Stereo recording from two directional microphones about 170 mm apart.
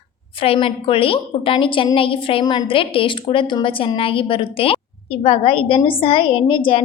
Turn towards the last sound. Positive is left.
turn(degrees=30)  # may be behind; listen again after turning